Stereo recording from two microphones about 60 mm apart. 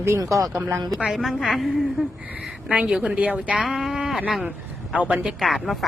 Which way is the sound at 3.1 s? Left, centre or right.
Right.